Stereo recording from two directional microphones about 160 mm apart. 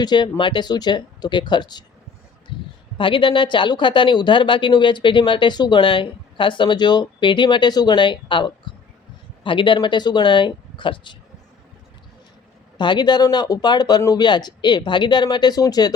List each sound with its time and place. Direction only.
0.0 s speech: 30° left (ahead or behind)
3.0 s speech: 30° left (ahead or behind)
12.7 s speech: 30° left (ahead or behind)